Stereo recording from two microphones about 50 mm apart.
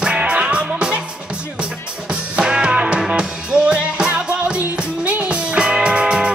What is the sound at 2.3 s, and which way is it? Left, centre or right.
Music, centre.